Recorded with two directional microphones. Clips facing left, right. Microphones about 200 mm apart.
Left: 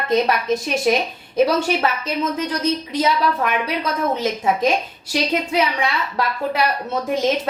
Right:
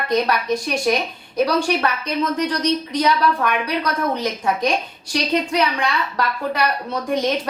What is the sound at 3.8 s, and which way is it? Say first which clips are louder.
Speech: left 1 dB; 25° left (ahead or behind).